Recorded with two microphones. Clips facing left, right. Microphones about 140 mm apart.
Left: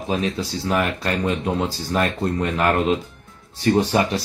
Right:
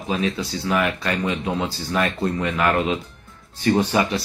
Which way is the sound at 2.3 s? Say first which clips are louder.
Left 1 dB; 40° left (ahead or behind).